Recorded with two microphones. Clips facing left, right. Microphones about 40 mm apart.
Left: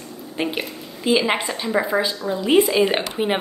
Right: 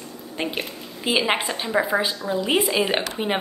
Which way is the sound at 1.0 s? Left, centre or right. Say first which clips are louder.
Left 2 dB; centre.